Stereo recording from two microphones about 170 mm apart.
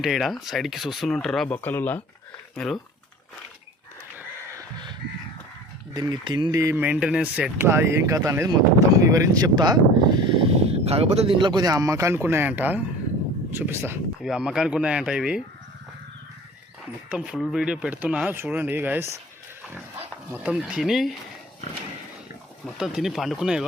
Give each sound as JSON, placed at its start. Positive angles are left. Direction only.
{"t": 0.0, "sound": "speech", "side_deg": 0}
{"t": 5.9, "sound": "speech", "side_deg": -25}
{"t": 14.2, "sound": "speech", "side_deg": -5}
{"t": 17.1, "sound": "speech", "side_deg": -5}
{"t": 20.3, "sound": "speech", "side_deg": -5}
{"t": 22.6, "sound": "speech", "side_deg": 0}